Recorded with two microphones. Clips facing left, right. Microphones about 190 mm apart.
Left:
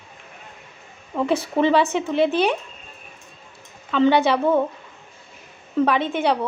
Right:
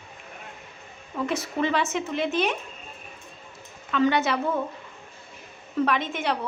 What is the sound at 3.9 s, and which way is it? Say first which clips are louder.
Speech: left 5 dB; 30° left (ahead or behind).